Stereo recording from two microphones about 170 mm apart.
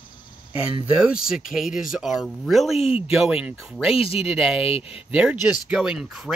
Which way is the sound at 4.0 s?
35° left (ahead or behind).